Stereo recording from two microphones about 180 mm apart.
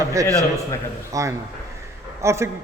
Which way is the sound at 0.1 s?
20° right (ahead or behind).